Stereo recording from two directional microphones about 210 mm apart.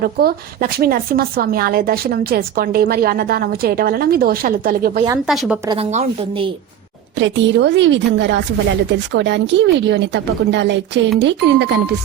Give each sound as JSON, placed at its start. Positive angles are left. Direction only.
{"t": 0.0, "sound": "speech", "side_deg": -45}
{"t": 5.2, "sound": "a woman's voice", "side_deg": 0}
{"t": 5.6, "sound": "speech", "side_deg": -25}
{"t": 7.2, "sound": "a woman's voice", "side_deg": -60}